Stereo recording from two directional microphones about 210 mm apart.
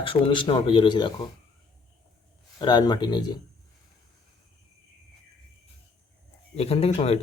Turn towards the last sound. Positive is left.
turn(degrees=30)  # may be behind; listen again after turning